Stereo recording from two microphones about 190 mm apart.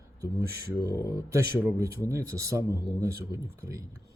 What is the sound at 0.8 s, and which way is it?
Speech, 20° left (ahead or behind).